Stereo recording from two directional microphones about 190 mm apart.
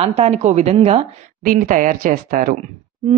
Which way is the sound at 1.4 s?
45° right (ahead or behind).